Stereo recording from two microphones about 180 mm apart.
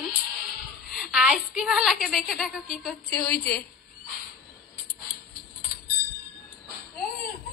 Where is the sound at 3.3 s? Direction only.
55° left (ahead or behind).